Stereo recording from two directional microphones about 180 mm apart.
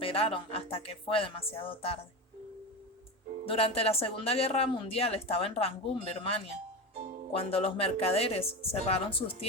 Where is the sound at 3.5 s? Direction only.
30° left (ahead or behind).